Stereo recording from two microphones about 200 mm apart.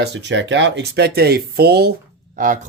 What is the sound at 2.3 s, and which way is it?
Speech, 40° right (ahead or behind).